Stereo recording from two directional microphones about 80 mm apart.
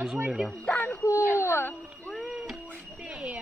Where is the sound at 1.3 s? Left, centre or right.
Left.